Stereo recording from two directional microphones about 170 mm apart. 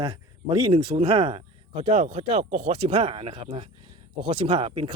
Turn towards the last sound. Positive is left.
turn(degrees=-30)  # may be behind; listen again after turning